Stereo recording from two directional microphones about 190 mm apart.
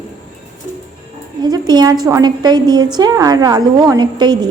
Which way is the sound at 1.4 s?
20° right (ahead or behind).